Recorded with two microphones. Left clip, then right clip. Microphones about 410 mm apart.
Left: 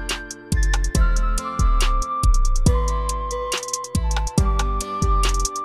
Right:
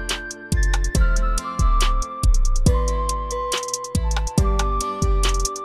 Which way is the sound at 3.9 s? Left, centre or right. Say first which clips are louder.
Even; centre.